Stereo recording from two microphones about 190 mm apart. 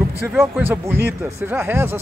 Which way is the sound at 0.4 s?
10° right (ahead or behind).